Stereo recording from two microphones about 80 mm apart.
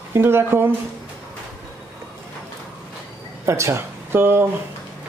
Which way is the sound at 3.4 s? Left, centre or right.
Right.